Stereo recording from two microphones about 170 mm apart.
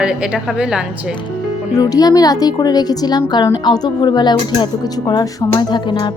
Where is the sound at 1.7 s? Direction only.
20° left (ahead or behind).